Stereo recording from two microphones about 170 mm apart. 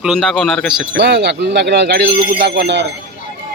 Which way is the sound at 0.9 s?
90° right.